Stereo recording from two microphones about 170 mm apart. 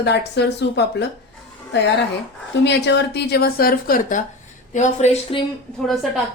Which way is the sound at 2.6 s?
90° left.